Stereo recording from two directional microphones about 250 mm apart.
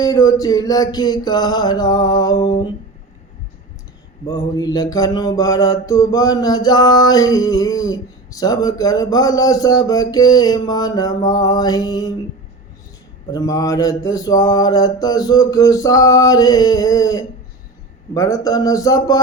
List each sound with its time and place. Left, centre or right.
0.0 s mantra: centre
4.3 s mantra: centre
13.3 s mantra: centre